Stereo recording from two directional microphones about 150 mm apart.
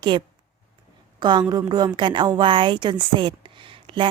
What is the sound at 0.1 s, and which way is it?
A woman's voice, 35° right (ahead or behind).